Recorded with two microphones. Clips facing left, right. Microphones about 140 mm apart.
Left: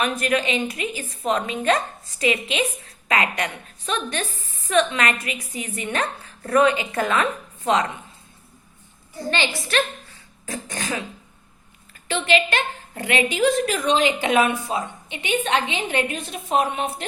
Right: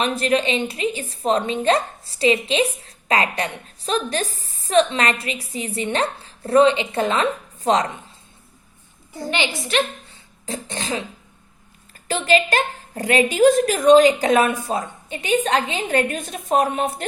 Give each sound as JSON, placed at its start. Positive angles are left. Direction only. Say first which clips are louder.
{"t": 0.0, "sound": "a woman's voice", "louder": "right 2 dB", "side_deg": -30}
{"t": 9.3, "sound": "a woman's voice", "louder": "right 1 dB", "side_deg": -15}
{"t": 12.0, "sound": "a woman's voice", "louder": "right 2 dB", "side_deg": -40}